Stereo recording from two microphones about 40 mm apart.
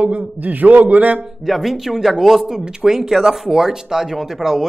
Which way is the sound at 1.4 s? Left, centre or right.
Centre.